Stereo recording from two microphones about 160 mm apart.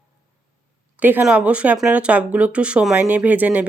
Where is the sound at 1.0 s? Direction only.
10° right (ahead or behind).